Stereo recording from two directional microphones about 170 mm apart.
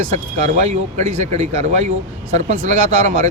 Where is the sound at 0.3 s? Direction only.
40° right (ahead or behind).